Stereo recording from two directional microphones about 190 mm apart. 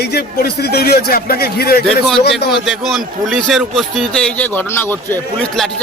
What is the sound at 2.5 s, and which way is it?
A man's voice, centre (ahead or behind).